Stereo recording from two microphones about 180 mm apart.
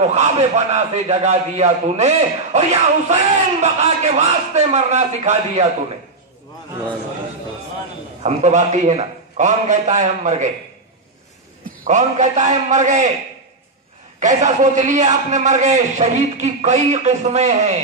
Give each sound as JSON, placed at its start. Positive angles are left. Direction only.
{"t": 0.0, "sound": "a man's voice", "side_deg": -40}
{"t": 8.2, "sound": "a man's voice", "side_deg": -40}
{"t": 11.8, "sound": "a man's voice", "side_deg": -40}
{"t": 14.2, "sound": "a man's voice", "side_deg": -40}